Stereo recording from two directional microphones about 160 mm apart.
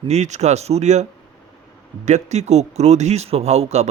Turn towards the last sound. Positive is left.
turn(degrees=-45)  # may be behind; listen again after turning